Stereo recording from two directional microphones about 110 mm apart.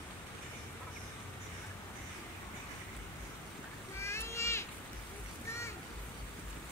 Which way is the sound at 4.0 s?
25° left (ahead or behind).